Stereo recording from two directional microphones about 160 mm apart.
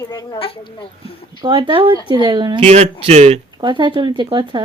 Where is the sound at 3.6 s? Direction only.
30° right (ahead or behind).